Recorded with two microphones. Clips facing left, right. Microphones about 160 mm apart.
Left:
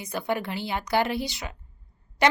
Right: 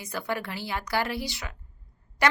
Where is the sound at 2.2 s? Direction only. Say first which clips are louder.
Left 3 dB; 20° left (ahead or behind).